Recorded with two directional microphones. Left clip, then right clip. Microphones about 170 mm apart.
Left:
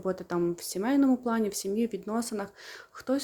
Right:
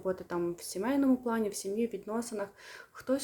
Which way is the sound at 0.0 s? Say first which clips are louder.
Left 4 dB; 25° left (ahead or behind).